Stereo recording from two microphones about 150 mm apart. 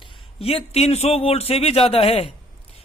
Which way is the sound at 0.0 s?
40° left (ahead or behind).